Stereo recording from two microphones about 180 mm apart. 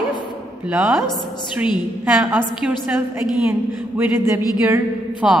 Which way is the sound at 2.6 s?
5° right (ahead or behind).